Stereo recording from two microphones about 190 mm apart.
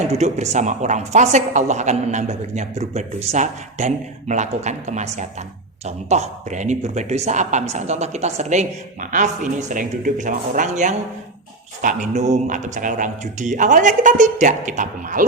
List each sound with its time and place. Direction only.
0.1 s a woman's voice: 35° right (ahead or behind)